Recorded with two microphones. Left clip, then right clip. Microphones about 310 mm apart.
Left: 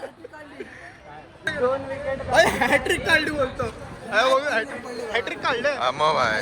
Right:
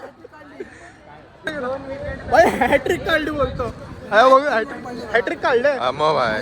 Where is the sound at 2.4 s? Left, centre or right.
Right.